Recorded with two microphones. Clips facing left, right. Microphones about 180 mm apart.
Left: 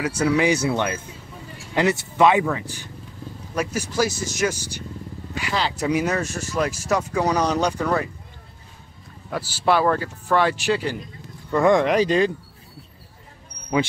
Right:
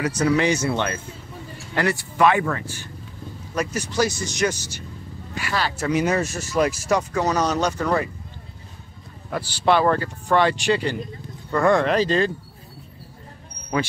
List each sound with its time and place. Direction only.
0.0 s speech: 10° left (ahead or behind)
6.0 s speech: 5° right (ahead or behind)
6.9 s speech: 5° left (ahead or behind)
9.3 s speech: 5° left (ahead or behind)
11.5 s speech: 15° left (ahead or behind)